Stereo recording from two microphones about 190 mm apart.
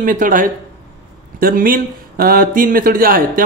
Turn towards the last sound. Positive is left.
turn(degrees=-50)  # may be behind; listen again after turning